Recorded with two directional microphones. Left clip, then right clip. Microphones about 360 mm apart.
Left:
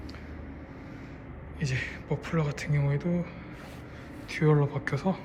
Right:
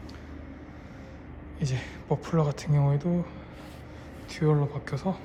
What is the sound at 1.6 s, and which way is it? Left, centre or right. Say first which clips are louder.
A woman's voice: left 3 dB; centre.